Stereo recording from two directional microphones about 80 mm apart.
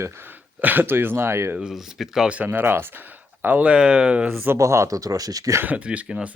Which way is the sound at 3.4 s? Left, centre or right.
Centre.